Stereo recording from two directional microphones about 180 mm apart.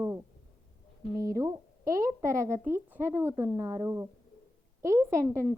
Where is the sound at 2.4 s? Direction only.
15° right (ahead or behind).